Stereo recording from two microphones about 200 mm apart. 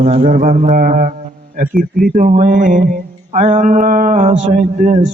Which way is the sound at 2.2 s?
40° right (ahead or behind).